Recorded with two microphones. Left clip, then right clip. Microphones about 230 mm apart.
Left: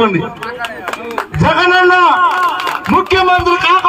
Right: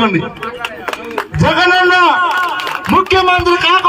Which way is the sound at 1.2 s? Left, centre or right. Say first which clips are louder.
Even; right.